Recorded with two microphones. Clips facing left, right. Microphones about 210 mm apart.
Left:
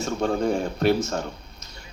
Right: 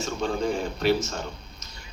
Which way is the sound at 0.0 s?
55° left (ahead or behind).